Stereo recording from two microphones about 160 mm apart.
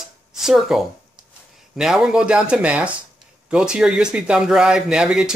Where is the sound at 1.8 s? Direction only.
5° right (ahead or behind).